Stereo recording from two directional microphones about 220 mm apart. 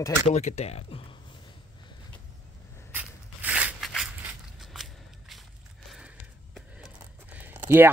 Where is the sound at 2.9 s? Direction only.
5° right (ahead or behind).